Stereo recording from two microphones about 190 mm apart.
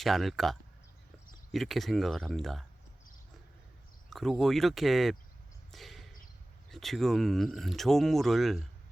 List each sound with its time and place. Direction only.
0.0 s speech: centre (ahead or behind)
1.5 s speech: centre (ahead or behind)
4.1 s speech: centre (ahead or behind)
5.7 s a sound: centre (ahead or behind)
6.7 s speech: centre (ahead or behind)